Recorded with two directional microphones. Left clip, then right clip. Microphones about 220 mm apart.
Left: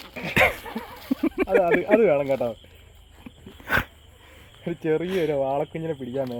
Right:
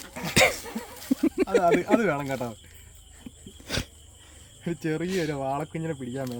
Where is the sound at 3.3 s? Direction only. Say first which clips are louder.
Left 1 dB; 20° right (ahead or behind).